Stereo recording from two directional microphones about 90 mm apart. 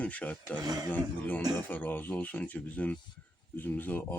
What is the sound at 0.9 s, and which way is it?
Speech, 20° left (ahead or behind).